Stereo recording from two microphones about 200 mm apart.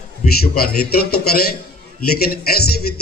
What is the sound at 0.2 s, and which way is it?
A man's voice, 50° left (ahead or behind).